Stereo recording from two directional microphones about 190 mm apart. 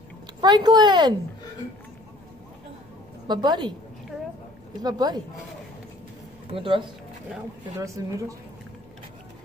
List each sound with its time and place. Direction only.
0.4 s speech: 20° right (ahead or behind)
3.3 s speech: 25° right (ahead or behind)
4.8 s speech: 20° right (ahead or behind)
6.5 s speech: 30° right (ahead or behind)
7.8 s speech: 15° right (ahead or behind)